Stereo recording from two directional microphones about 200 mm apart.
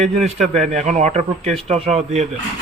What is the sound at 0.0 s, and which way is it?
Speech, 35° right (ahead or behind).